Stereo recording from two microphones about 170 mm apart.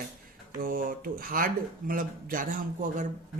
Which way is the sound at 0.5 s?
55° right (ahead or behind).